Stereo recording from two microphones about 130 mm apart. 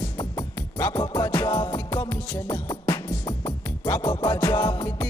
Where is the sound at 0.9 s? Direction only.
30° left (ahead or behind).